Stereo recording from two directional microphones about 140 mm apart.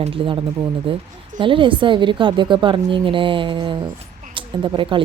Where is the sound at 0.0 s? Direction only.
40° right (ahead or behind).